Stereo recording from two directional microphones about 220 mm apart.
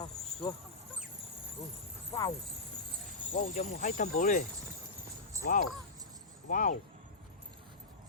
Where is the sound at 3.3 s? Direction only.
35° left (ahead or behind).